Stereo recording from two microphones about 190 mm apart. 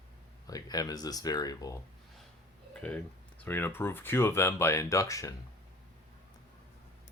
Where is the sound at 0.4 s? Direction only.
20° left (ahead or behind).